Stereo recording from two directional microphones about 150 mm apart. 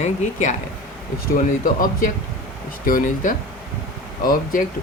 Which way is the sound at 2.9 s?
65° left (ahead or behind).